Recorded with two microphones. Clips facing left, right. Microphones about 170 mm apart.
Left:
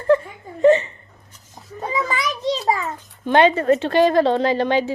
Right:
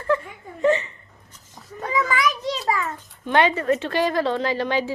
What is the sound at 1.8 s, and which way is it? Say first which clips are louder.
Children playing: even; 25° left (ahead or behind).